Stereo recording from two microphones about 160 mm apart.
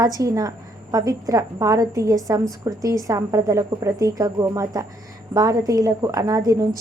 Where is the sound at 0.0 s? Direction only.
20° right (ahead or behind).